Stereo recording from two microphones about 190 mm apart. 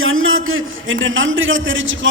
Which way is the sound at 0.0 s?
90° right.